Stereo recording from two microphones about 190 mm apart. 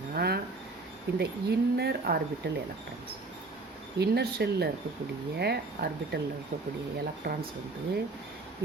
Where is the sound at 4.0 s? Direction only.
60° right (ahead or behind).